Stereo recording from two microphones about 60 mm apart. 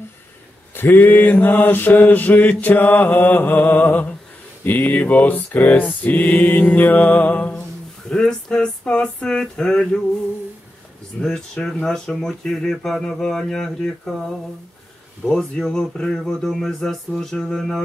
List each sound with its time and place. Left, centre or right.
0.7 s mantra: left
8.1 s speech: centre
11.1 s speech: centre
15.2 s speech: centre